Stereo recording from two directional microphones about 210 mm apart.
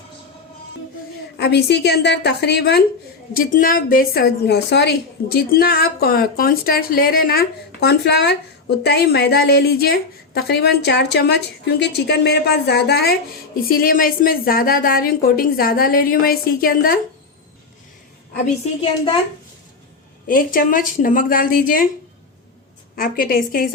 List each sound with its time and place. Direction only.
1.4 s a woman's voice: 50° left (ahead or behind)
18.4 s a woman's voice: 30° left (ahead or behind)
20.2 s speech: 40° left (ahead or behind)
23.0 s a woman's voice: 45° left (ahead or behind)